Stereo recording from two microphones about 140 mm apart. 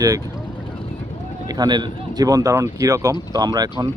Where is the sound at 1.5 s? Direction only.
30° right (ahead or behind).